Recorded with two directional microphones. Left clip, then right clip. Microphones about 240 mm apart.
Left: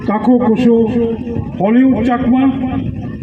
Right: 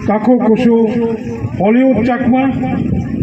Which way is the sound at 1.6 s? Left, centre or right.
Right.